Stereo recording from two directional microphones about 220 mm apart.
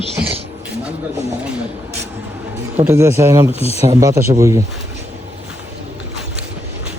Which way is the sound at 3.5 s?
25° left (ahead or behind).